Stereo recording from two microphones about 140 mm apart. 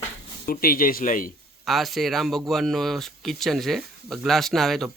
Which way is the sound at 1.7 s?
Centre (ahead or behind).